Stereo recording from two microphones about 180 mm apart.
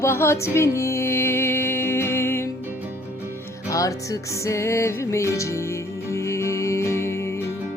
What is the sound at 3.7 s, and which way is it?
Music, 20° left (ahead or behind).